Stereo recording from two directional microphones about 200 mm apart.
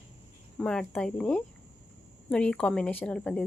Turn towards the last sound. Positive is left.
turn(degrees=5)  # may be behind; listen again after turning